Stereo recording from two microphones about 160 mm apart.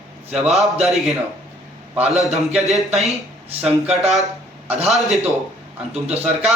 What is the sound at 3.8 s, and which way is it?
Speech, 40° right (ahead or behind).